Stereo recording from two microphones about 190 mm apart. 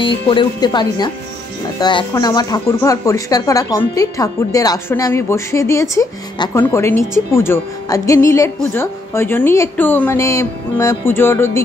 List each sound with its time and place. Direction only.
0.0 s speech: 25° left (ahead or behind)